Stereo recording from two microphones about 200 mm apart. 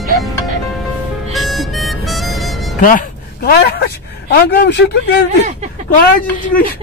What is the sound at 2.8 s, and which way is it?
Speech, 40° left (ahead or behind).